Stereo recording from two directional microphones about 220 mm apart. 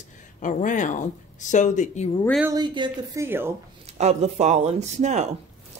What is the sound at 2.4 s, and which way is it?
Speech, 20° right (ahead or behind).